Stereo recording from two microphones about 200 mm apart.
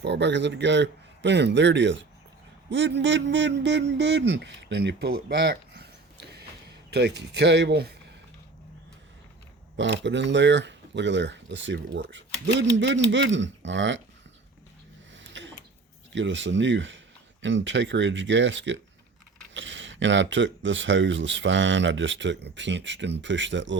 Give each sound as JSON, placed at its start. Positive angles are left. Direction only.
{"t": 0.0, "sound": "speech", "side_deg": -60}
{"t": 9.7, "sound": "speech", "side_deg": -65}
{"t": 15.1, "sound": "a sound", "side_deg": -65}
{"t": 16.1, "sound": "speech", "side_deg": -65}